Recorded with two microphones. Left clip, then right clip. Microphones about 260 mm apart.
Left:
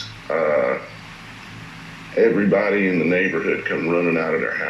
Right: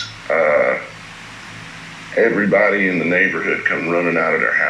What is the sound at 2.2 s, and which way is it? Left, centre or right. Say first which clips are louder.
Speech: right 3 dB; centre.